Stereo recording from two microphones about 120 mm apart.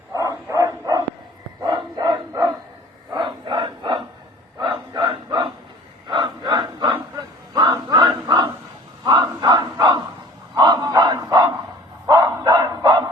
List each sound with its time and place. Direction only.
0.1 s bow-wow: 30° right (ahead or behind)
3.1 s a sound: 40° right (ahead or behind)
9.0 s battle cry: 35° right (ahead or behind)
10.5 s bow-wow: 35° right (ahead or behind)
12.0 s dog: 35° right (ahead or behind)